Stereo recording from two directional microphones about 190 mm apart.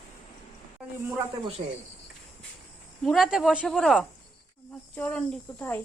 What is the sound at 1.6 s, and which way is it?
Speech, 35° right (ahead or behind).